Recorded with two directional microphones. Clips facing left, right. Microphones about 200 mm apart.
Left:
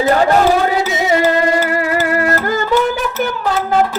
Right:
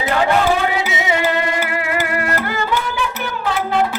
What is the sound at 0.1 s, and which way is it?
Music, 40° left (ahead or behind).